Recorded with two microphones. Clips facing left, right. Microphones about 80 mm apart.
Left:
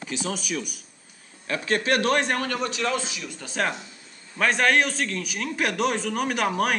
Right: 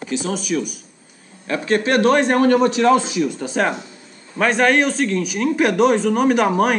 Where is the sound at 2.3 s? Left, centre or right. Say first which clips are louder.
Right 12 dB; right.